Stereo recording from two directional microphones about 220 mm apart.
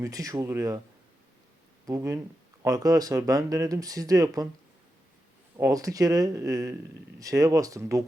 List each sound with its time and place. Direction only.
0.0 s speech: 15° right (ahead or behind)
1.9 s speech: 15° right (ahead or behind)
5.5 s speech: 15° right (ahead or behind)